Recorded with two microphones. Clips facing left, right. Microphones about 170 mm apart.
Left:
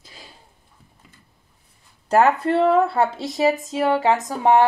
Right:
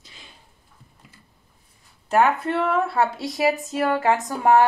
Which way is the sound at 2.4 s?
30° left (ahead or behind).